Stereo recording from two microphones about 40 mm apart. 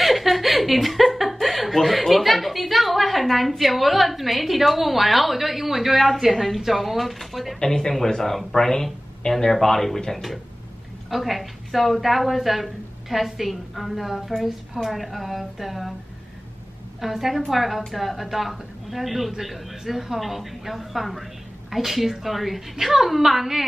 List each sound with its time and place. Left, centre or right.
0.0 s a woman's voice: centre
7.6 s a woman's voice: centre
17.0 s a woman's voice: centre